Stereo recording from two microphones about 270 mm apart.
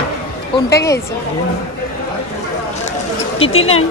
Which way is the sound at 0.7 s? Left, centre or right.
Centre.